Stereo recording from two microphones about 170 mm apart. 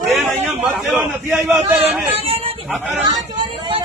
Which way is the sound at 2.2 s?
35° right (ahead or behind).